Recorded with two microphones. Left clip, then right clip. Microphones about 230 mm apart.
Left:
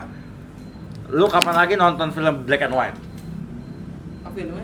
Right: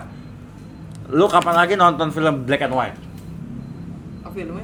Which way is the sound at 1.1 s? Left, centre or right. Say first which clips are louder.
Right 2 dB; right.